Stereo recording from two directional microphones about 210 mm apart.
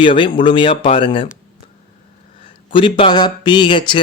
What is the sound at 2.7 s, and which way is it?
Speech, 25° left (ahead or behind).